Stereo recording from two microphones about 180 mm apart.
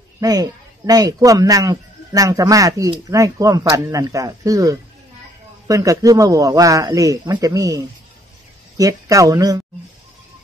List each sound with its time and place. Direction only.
0.2 s speech: 20° right (ahead or behind)